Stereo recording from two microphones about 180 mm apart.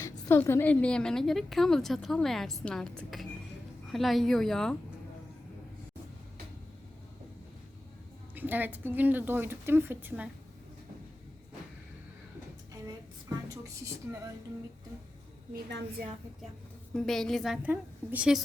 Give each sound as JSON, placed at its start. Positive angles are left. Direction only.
{"t": 0.0, "sound": "a woman's voice", "side_deg": 15}
{"t": 8.4, "sound": "speech", "side_deg": -10}
{"t": 16.9, "sound": "a woman's voice", "side_deg": 0}